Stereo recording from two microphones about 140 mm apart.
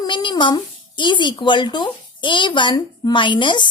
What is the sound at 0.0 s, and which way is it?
Speech, 35° left (ahead or behind).